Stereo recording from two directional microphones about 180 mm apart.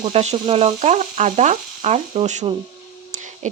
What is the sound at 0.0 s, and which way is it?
Speech, 35° right (ahead or behind).